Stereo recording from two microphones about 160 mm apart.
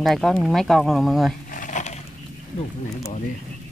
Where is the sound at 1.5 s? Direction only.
55° left (ahead or behind).